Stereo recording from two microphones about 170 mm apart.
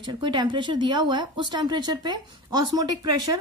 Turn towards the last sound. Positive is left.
turn(degrees=-20)  # may be behind; listen again after turning